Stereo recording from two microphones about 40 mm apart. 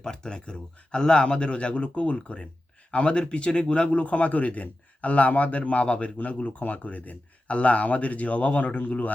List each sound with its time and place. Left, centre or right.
0.0 s speech: centre; by 9.1 s left